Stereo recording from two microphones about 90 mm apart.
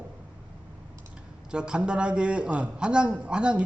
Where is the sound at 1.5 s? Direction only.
10° right (ahead or behind).